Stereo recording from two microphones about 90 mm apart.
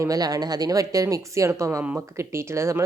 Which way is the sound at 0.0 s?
40° right (ahead or behind).